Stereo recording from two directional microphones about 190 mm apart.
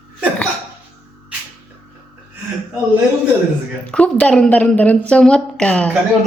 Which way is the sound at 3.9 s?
5° left (ahead or behind).